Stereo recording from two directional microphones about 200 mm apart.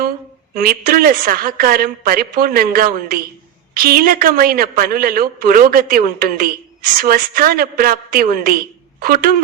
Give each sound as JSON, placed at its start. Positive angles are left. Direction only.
{"t": 0.5, "sound": "a woman's voice", "side_deg": -45}